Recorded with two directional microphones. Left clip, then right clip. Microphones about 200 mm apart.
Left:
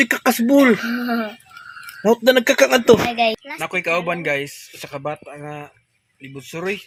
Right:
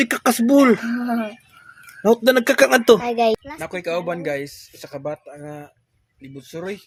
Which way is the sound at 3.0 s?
45° right (ahead or behind).